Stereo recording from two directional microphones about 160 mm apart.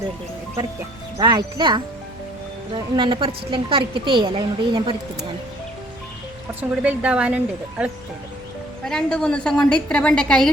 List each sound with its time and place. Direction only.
1.2 s a woman's voice: 30° right (ahead or behind)
6.5 s speech: 10° right (ahead or behind)
8.8 s a woman's voice: 5° left (ahead or behind)